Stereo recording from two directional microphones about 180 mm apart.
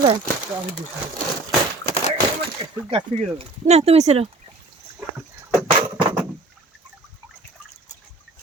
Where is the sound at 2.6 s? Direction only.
30° right (ahead or behind).